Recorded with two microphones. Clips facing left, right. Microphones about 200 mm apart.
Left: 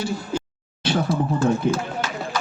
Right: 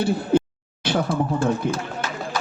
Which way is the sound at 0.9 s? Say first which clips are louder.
Even; 55° right (ahead or behind).